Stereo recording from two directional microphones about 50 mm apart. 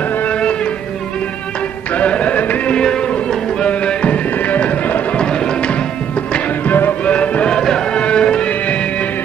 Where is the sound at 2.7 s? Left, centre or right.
Centre; by 5.0 s left.